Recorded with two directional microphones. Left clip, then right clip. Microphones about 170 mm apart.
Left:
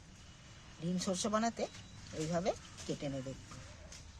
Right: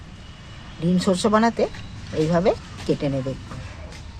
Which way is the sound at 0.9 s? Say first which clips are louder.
Right 16 dB; 10° right (ahead or behind).